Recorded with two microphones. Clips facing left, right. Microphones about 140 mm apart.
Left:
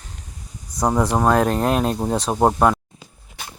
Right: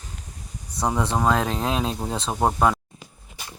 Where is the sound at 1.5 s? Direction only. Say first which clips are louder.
Left 6 dB; 55° left (ahead or behind).